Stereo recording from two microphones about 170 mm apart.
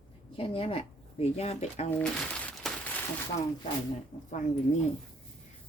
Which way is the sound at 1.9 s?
5° left (ahead or behind).